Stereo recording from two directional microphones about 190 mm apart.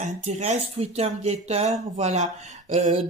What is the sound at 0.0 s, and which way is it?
Speech, 35° right (ahead or behind).